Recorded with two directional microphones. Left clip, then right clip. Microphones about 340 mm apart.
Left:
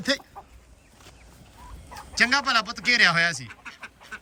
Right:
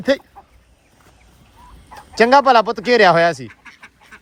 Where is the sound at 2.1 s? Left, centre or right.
Centre.